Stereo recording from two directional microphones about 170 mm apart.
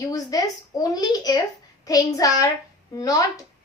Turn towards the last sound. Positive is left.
turn(degrees=20)  # may be behind; listen again after turning